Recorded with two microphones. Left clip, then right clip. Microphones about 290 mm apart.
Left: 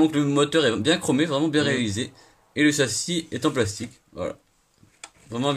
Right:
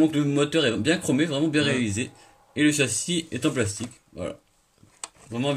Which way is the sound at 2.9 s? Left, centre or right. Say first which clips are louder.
Left 1 dB; left.